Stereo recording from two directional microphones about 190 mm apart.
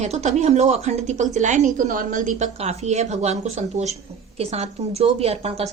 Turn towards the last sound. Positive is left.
turn(degrees=-35)  # may be behind; listen again after turning